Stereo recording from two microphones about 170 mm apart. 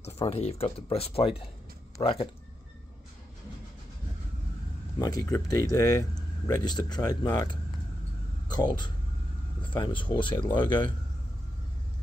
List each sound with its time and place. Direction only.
0.0 s speech: 35° left (ahead or behind)
4.9 s speech: 20° left (ahead or behind)
8.5 s speech: 25° left (ahead or behind)